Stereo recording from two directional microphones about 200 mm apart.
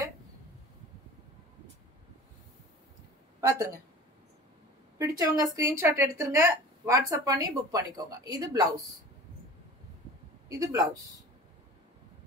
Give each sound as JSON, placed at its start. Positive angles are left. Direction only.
{"t": 3.3, "sound": "a woman's voice", "side_deg": -15}
{"t": 4.9, "sound": "a woman's voice", "side_deg": -15}
{"t": 10.6, "sound": "a woman's voice", "side_deg": -15}